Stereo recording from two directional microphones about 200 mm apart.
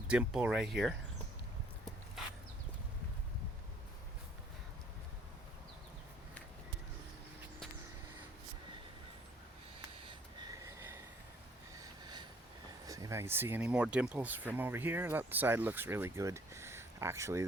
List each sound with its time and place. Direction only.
0.1 s speech: 5° right (ahead or behind)
10.0 s snort: 20° right (ahead or behind)
11.8 s a sound: 20° right (ahead or behind)
12.8 s speech: 15° right (ahead or behind)